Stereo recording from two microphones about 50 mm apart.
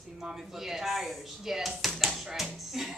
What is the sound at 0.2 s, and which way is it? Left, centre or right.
Speech, centre.